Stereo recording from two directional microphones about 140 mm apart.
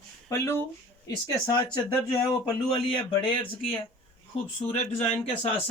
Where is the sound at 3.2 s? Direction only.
40° left (ahead or behind).